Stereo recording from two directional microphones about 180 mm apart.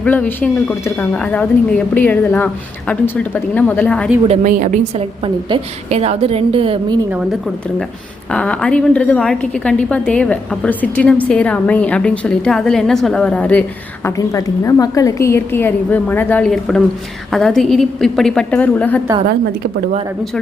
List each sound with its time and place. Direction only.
0.0 s a woman's voice: 10° left (ahead or behind)
4.3 s a woman's voice: 45° right (ahead or behind); by 7.0 s 30° right (ahead or behind)
8.3 s a woman's voice: 5° left (ahead or behind)
14.2 s a woman's voice: 20° left (ahead or behind)